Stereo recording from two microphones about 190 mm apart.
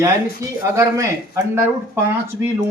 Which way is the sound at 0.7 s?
15° right (ahead or behind).